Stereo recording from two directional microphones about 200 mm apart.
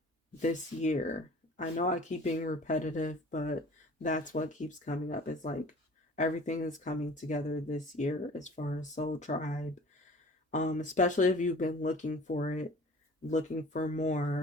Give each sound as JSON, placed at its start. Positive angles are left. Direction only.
{"t": 0.3, "sound": "speech", "side_deg": 35}